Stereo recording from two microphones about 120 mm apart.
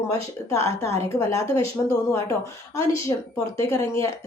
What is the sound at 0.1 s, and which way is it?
Speech, 25° left (ahead or behind).